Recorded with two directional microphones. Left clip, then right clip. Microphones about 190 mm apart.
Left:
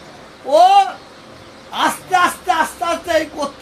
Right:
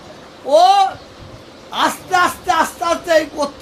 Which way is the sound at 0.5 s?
5° right (ahead or behind).